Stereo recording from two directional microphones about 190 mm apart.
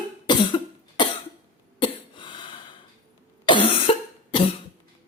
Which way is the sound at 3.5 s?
25° left (ahead or behind).